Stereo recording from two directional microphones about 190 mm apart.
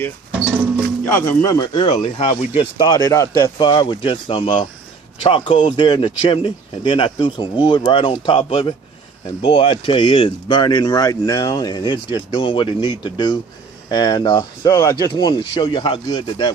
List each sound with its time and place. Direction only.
1.0 s speech: 15° left (ahead or behind); by 2.6 s 35° left (ahead or behind)
2.7 s speech: 20° left (ahead or behind)